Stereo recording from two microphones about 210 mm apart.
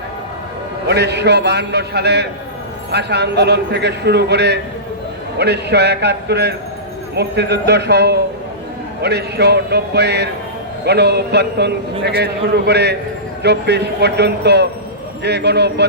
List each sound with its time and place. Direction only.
0.9 s a man's voice: 50° right (ahead or behind)